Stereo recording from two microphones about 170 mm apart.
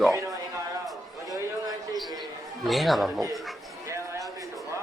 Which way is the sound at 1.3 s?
20° right (ahead or behind).